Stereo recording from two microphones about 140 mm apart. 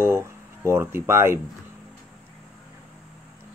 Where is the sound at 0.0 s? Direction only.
20° right (ahead or behind).